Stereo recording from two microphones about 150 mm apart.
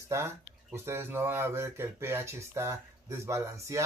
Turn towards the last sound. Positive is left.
turn(degrees=-20)  # may be behind; listen again after turning